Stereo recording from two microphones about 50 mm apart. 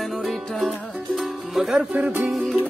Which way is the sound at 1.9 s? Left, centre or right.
Right.